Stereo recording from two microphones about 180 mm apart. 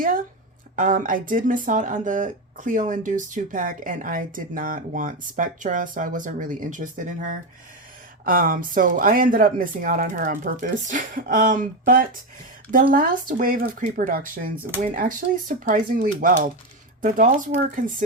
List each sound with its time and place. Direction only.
0.8 s speech: 45° right (ahead or behind)